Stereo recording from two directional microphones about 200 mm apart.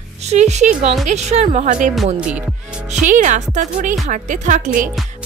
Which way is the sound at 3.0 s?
40° right (ahead or behind).